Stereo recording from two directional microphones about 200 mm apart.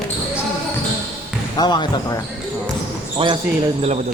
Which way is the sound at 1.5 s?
20° left (ahead or behind).